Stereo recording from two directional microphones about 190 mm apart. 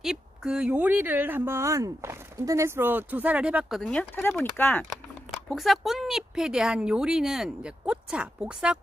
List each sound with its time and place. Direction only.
0.0 s speech: centre (ahead or behind)
5.5 s speech: centre (ahead or behind)